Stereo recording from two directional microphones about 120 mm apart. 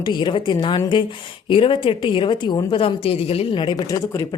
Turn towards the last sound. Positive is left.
turn(degrees=30)  # may be behind; listen again after turning